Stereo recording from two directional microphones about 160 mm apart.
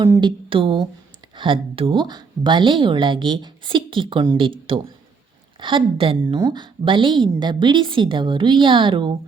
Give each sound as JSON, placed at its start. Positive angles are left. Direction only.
{"t": 0.2, "sound": "a woman's voice", "side_deg": -30}